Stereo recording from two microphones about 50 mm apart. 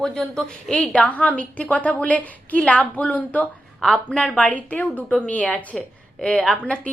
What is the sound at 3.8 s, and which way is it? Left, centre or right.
Speech, centre.